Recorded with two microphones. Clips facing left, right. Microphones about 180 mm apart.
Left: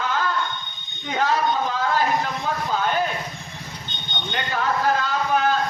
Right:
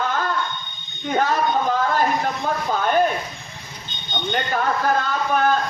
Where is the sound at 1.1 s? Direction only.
50° right (ahead or behind).